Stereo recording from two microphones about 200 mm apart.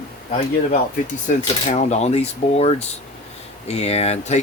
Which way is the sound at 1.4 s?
35° left (ahead or behind).